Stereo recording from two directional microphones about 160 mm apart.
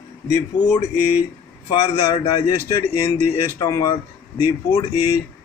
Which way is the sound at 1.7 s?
30° left (ahead or behind).